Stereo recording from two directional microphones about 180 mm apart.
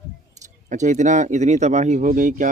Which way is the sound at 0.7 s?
40° right (ahead or behind).